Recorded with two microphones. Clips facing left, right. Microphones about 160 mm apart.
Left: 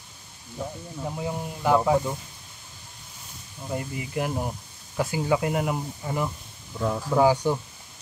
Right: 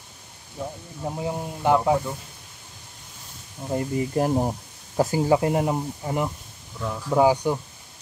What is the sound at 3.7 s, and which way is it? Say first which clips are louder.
Speech: right 6 dB; 40° right (ahead or behind).